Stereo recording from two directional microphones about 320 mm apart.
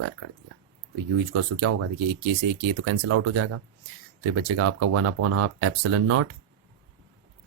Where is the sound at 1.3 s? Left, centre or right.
Right.